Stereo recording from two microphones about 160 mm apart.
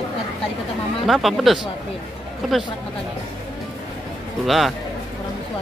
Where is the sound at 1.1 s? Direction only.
Centre (ahead or behind).